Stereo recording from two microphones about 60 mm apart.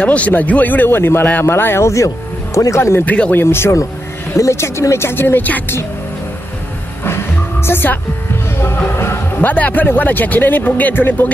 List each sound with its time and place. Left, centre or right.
0.0 s speech: left
1.9 s speech: left
3.1 s speech: left
3.4 s speech: left
7.6 s speech: left
8.9 s music: left
9.4 s speech: left